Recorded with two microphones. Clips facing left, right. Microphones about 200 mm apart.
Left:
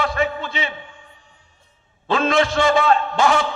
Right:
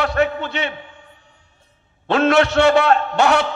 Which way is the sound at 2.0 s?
65° right (ahead or behind).